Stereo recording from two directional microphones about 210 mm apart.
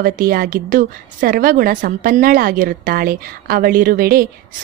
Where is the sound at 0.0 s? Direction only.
45° right (ahead or behind).